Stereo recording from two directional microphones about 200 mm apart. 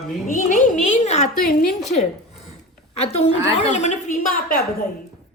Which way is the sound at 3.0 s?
35° left (ahead or behind).